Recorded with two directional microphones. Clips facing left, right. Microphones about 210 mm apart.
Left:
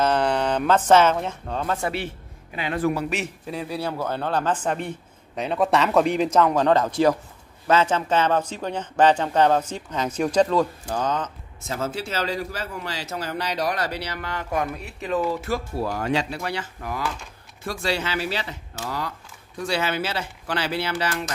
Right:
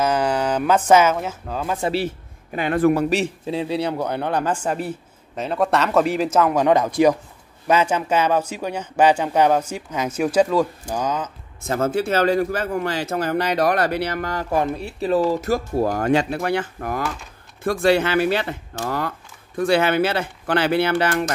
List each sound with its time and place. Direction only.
0.0 s speech: 10° right (ahead or behind)
1.8 s a man's voice: 30° right (ahead or behind)
2.5 s speech: 50° right (ahead or behind)
3.1 s speech: 30° right (ahead or behind); by 11.3 s 10° right (ahead or behind)
11.6 s speech: 55° right (ahead or behind)